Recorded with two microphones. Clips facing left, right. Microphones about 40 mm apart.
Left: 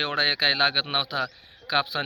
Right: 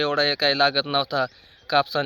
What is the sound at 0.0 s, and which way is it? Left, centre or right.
Speech, left.